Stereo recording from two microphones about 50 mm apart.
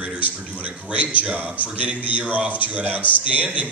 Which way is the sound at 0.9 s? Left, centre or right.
Right.